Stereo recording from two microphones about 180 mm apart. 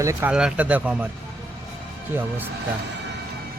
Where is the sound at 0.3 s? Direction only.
5° right (ahead or behind).